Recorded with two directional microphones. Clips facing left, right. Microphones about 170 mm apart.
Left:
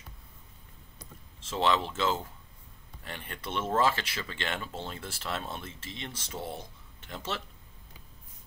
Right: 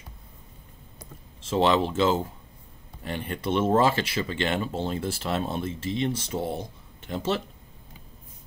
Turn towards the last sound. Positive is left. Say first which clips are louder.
# right 9 dB
turn(degrees=-30)  # may be behind; listen again after turning